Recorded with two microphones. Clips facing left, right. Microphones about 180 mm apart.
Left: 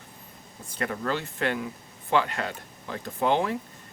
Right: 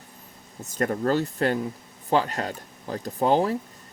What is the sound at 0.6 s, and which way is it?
Speech, 45° right (ahead or behind).